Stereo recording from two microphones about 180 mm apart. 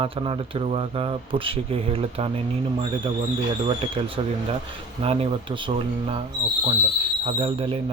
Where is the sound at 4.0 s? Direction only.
30° right (ahead or behind).